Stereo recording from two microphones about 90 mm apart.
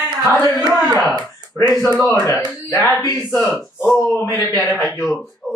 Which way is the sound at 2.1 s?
40° left (ahead or behind).